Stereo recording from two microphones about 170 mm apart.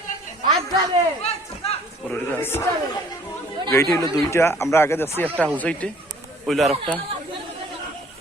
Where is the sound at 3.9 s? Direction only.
20° left (ahead or behind); by 7.0 s centre (ahead or behind).